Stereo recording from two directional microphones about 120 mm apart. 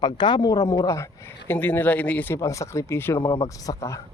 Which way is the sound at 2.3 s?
25° left (ahead or behind).